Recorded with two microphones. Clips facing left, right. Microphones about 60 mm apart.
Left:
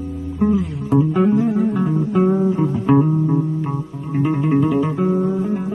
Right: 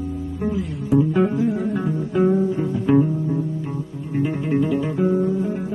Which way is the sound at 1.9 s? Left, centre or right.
Left.